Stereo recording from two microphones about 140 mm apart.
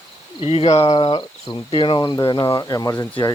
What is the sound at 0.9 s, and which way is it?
Speech, 35° left (ahead or behind).